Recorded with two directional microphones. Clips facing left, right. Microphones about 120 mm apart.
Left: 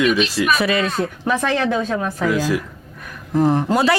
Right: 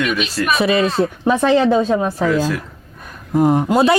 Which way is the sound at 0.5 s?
25° right (ahead or behind).